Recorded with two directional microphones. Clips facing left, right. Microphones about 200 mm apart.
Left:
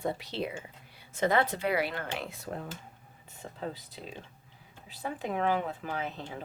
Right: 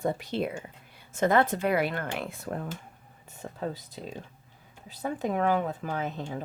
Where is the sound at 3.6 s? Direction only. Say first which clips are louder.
Right 4 dB; 45° right (ahead or behind).